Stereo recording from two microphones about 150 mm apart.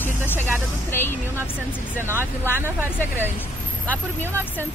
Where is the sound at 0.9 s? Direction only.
15° left (ahead or behind).